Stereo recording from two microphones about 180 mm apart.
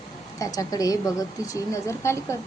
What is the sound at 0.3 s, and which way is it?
A woman's voice, 20° left (ahead or behind).